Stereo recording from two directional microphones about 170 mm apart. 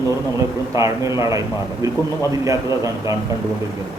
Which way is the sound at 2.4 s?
20° right (ahead or behind).